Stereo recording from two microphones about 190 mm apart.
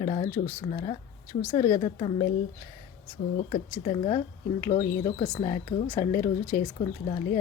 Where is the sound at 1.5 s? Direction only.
20° left (ahead or behind).